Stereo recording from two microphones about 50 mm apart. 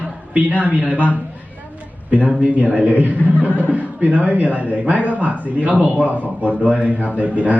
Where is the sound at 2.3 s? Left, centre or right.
Right.